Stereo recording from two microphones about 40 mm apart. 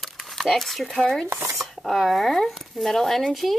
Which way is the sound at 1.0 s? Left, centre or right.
Centre.